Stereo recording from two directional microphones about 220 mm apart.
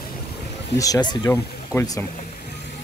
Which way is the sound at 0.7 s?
15° left (ahead or behind).